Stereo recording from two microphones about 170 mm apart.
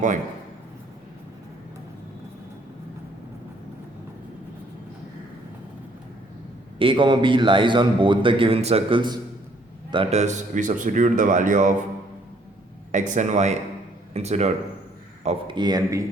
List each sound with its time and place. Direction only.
6.7 s a man's voice: 30° right (ahead or behind); by 11.7 s 50° right (ahead or behind)
12.9 s speech: 45° right (ahead or behind)
15.5 s a man's voice: 25° right (ahead or behind)